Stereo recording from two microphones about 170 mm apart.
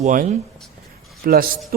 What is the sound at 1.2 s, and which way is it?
Speech, 55° right (ahead or behind).